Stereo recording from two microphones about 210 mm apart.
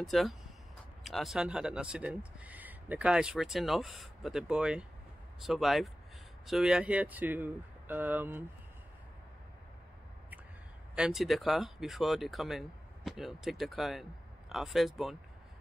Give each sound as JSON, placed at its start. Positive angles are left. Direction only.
{"t": 0.0, "sound": "speech", "side_deg": 0}
{"t": 11.0, "sound": "speech", "side_deg": 0}